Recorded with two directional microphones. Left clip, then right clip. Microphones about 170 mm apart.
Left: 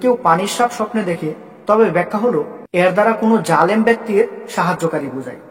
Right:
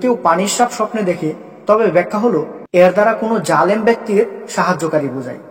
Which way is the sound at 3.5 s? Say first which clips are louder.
Right 2 dB; 10° right (ahead or behind).